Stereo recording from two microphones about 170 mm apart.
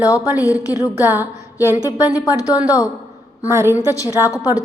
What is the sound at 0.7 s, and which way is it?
A woman's voice, 10° right (ahead or behind).